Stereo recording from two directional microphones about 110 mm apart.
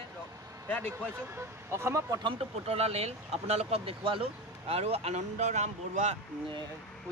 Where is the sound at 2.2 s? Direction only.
55° right (ahead or behind); by 6.2 s 90° right.